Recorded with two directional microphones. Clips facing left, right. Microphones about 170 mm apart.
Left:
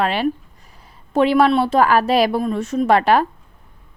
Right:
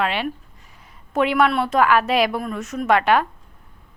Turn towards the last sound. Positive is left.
turn(degrees=35)  # may be behind; listen again after turning